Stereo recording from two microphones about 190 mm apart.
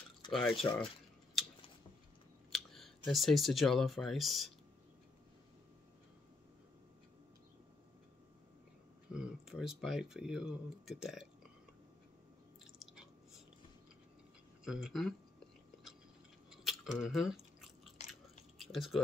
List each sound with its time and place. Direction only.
0.3 s speech: 5° left (ahead or behind)
2.5 s speech: centre (ahead or behind)
9.1 s speech: 5° right (ahead or behind)
12.7 s chewing: centre (ahead or behind)
14.6 s speech: centre (ahead or behind)
16.6 s chewing: centre (ahead or behind)
18.6 s speech: centre (ahead or behind)